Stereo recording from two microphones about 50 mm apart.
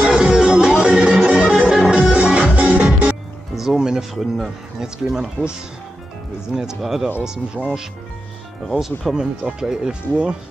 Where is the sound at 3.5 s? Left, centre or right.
Centre.